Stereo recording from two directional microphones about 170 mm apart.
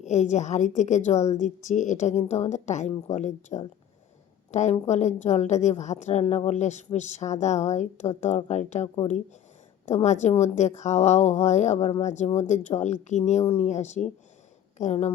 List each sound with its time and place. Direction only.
0.0 s a woman's voice: 40° left (ahead or behind)